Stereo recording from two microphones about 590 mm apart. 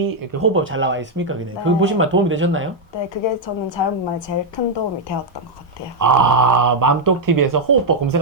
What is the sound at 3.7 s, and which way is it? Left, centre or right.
Speech, left.